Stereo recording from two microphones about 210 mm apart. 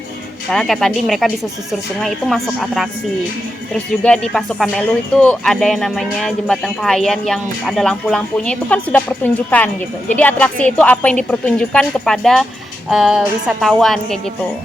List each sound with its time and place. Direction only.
0.5 s speech: centre (ahead or behind)
4.0 s speech: 5° left (ahead or behind)